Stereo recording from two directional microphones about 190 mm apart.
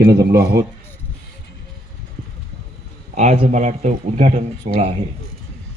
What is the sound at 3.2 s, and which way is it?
Speech, 40° right (ahead or behind).